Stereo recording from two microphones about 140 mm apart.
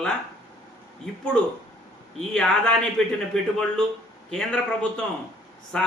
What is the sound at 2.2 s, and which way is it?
Speech, 5° left (ahead or behind).